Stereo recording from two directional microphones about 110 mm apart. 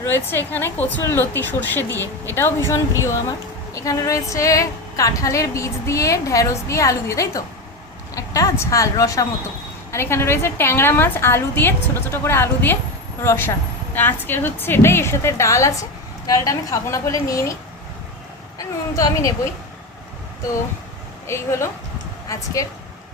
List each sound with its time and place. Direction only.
0.0 s a woman's voice: 20° left (ahead or behind)
18.9 s a woman's voice: 30° left (ahead or behind)
21.2 s a woman's voice: 25° left (ahead or behind)